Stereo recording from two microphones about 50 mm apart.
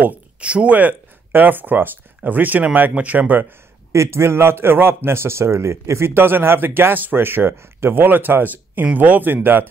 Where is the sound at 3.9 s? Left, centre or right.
Right.